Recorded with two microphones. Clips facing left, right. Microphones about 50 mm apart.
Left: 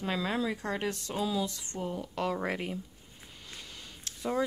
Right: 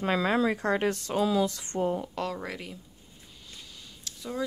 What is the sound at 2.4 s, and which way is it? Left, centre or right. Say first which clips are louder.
Speech: left 4 dB; left.